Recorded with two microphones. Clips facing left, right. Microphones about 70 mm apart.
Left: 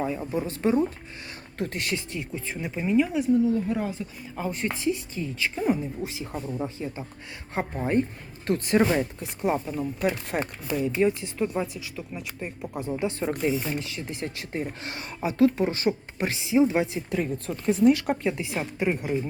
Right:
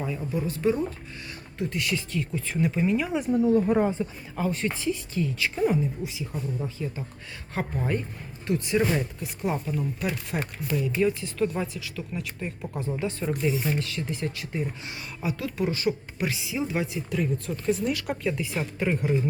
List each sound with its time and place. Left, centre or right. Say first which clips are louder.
0.0 s speech: left 2 dB; left
1.5 s speech: even; left
2.0 s speech: right 3 dB; centre
3.3 s speech: right 5 dB; right
3.9 s speech: right 4 dB; centre
5.5 s speech: right 1 dB; centre
6.0 s speech: left 1 dB; left
8.4 s speech: left 2 dB; left
8.8 s speech: left 3 dB; left
11.5 s speech: left 1 dB; centre; by 14.7 s left
14.8 s speech: left 2 dB; left
18.6 s speech: even; centre